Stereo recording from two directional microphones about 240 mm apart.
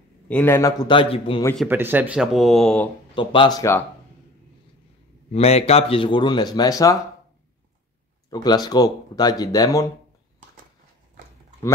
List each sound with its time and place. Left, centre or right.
0.3 s speech: centre
1.6 s speech: centre
3.2 s speech: left
5.3 s a man's voice: left
8.3 s speech: centre